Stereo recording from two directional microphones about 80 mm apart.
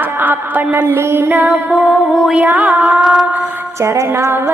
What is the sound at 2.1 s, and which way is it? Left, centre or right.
Music, centre.